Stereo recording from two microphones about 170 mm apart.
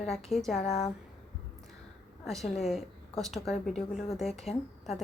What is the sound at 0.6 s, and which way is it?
Speech, 40° left (ahead or behind).